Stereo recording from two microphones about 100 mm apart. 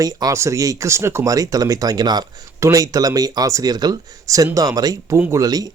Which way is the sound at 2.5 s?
30° right (ahead or behind).